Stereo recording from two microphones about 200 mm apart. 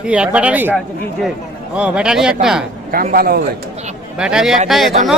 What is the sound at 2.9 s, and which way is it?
Speech, 45° right (ahead or behind).